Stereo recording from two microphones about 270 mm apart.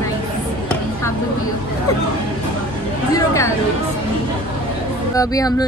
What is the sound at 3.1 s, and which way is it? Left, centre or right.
Chatter, centre.